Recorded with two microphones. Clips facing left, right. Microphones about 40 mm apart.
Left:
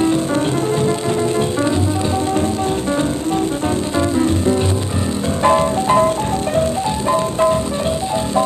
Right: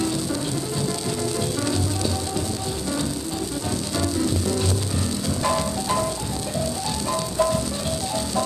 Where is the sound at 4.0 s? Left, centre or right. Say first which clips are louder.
Left 7 dB; left.